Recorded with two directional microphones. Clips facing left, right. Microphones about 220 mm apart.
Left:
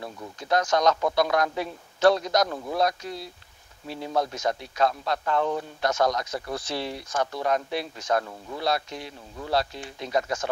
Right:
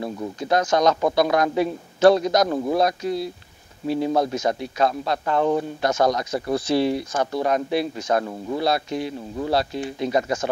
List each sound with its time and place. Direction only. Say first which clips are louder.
0.4 s speech: right 3 dB; 5° right (ahead or behind)
2.4 s speech: right 7 dB; 30° right (ahead or behind)
2.8 s speech: right 5 dB; 10° right (ahead or behind)